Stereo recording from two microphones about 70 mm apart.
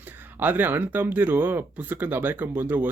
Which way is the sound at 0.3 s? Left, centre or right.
Right.